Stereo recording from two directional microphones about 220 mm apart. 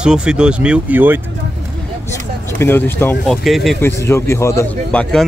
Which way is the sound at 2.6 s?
10° left (ahead or behind).